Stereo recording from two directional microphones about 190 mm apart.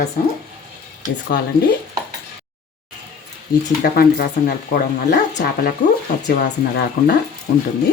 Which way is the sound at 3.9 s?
55° left (ahead or behind).